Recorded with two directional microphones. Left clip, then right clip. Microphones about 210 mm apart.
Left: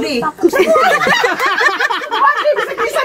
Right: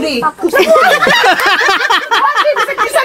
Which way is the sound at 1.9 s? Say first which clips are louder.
Right 3 dB; 30° right (ahead or behind).